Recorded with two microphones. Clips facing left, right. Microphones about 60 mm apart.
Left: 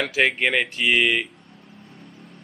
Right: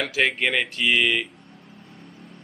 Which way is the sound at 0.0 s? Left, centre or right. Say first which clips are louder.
Left 2 dB; centre.